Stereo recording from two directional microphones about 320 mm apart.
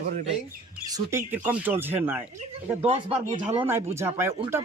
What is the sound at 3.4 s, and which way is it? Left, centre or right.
Speech, centre.